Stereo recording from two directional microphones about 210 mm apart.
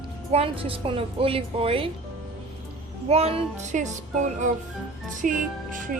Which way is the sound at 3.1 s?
30° right (ahead or behind).